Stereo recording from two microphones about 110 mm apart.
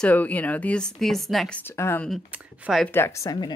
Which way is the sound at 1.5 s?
20° left (ahead or behind).